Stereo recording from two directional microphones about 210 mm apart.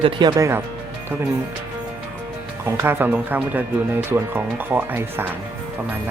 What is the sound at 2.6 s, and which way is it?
Speech, 10° right (ahead or behind).